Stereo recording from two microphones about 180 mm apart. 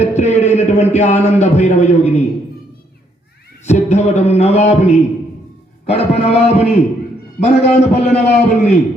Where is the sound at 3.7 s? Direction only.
40° left (ahead or behind).